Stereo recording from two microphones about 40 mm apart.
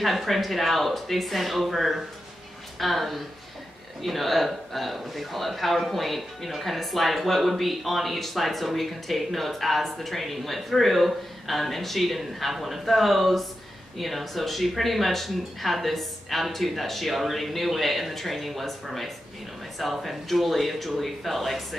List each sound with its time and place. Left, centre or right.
0.0 s speech: centre